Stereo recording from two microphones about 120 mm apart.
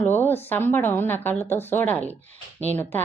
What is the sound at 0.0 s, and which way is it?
A woman's voice, 15° left (ahead or behind).